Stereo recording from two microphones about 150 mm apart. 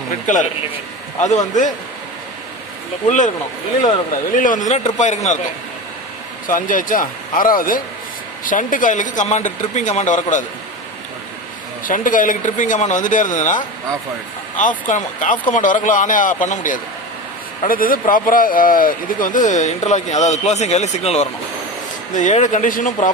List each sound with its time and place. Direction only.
0.1 s a man's voice: 55° left (ahead or behind)
3.1 s speech: 55° left (ahead or behind)
6.5 s speech: 60° left (ahead or behind)
11.9 s speech: 60° left (ahead or behind)
14.8 s speech: 60° left (ahead or behind)
17.7 s speech: 70° left (ahead or behind); by 21.2 s 45° left (ahead or behind)
22.1 s speech: 55° left (ahead or behind)